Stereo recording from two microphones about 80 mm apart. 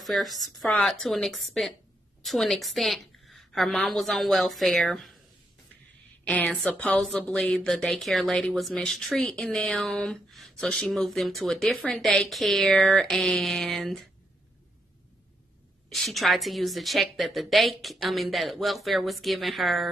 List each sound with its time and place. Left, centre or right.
0.0 s speech: centre
6.2 s a woman's voice: centre
15.9 s speech: centre